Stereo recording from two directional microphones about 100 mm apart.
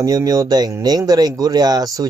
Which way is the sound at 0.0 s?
35° right (ahead or behind).